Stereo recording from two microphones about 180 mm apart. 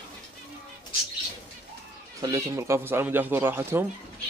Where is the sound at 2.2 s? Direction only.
20° right (ahead or behind).